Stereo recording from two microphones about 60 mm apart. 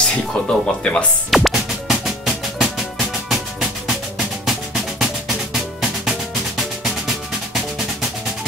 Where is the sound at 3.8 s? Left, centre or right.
Centre.